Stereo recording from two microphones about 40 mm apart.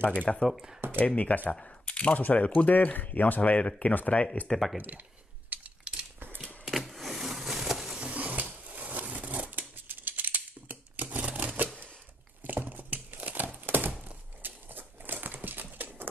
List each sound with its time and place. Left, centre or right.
0.0 s speech: left
0.5 s speech: centre
0.9 s speech: left
1.5 s speech: left
2.7 s speech: left
3.5 s speech: left
4.7 s speech: right
5.5 s coin: right
6.1 s a sound: right
6.6 s a sound: centre
8.0 s a sound: right
12.4 s crumpling: right